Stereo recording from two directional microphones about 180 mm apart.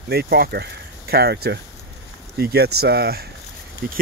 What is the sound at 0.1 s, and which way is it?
Speech, 60° right (ahead or behind).